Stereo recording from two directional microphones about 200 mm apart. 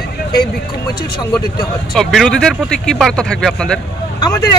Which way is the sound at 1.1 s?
20° left (ahead or behind).